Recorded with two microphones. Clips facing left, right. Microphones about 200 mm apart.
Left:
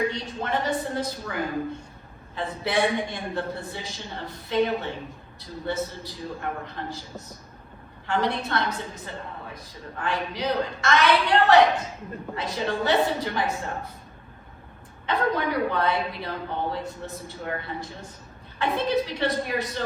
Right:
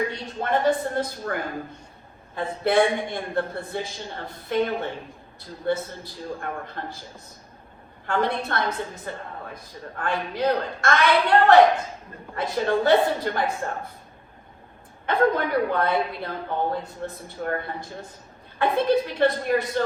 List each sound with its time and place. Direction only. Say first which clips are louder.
0.1 s a woman's voice: right 3 dB; 50° right (ahead or behind)
8.0 s a woman's voice: right 1 dB; 50° right (ahead or behind)
10.0 s a woman's voice: right 3 dB; 50° right (ahead or behind)
15.0 s a woman's voice: right 3 dB; 50° right (ahead or behind)